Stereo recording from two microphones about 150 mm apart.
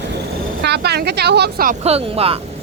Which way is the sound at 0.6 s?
90° right.